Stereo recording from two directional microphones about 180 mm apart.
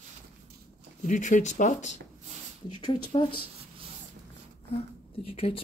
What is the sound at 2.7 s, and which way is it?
Speech, 25° left (ahead or behind).